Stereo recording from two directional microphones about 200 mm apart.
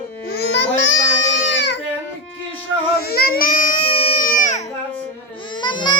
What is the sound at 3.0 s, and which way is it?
Baby cry, 50° left (ahead or behind).